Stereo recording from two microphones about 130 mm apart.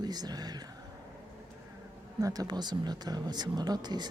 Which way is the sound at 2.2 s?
30° right (ahead or behind).